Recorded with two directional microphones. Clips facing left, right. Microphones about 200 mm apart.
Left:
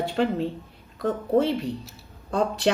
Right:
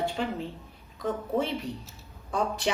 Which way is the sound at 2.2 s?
65° left (ahead or behind).